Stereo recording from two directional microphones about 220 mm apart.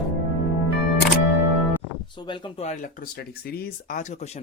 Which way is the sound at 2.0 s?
20° left (ahead or behind).